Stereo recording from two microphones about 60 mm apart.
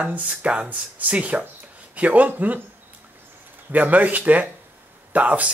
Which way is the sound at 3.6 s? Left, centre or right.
Right.